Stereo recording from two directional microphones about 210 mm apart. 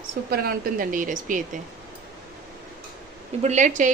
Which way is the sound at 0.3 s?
45° right (ahead or behind).